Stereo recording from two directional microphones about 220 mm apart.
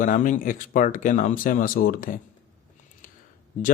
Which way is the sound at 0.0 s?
35° left (ahead or behind).